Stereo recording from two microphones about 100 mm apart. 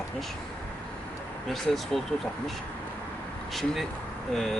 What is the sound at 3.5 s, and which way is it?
Speech, centre (ahead or behind).